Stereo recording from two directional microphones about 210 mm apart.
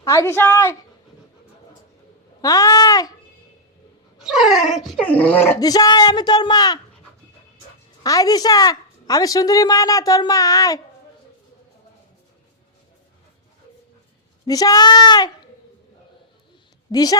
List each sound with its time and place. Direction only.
0.0 s a woman's voice: 15° left (ahead or behind)
2.4 s a woman's voice: 15° left (ahead or behind)
4.2 s a woman's voice: centre (ahead or behind); by 6.7 s 20° left (ahead or behind)
8.0 s a woman's voice: 15° left (ahead or behind)
14.4 s speech: 15° left (ahead or behind)
16.9 s a woman's voice: 15° left (ahead or behind)